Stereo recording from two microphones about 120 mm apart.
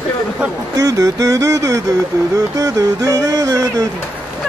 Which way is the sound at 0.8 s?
30° right (ahead or behind).